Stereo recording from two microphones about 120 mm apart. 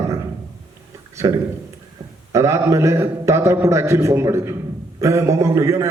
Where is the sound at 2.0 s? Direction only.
30° right (ahead or behind).